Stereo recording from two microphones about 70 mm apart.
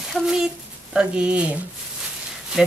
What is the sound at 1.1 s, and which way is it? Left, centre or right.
Speech, centre.